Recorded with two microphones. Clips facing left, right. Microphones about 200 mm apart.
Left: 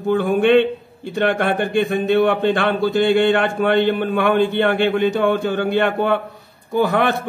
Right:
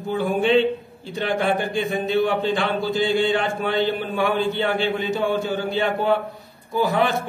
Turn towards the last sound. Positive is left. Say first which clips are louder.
# left 3 dB
turn(degrees=60)  # may be behind; listen again after turning